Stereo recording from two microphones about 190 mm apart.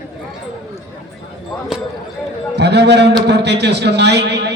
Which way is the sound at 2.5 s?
60° right (ahead or behind).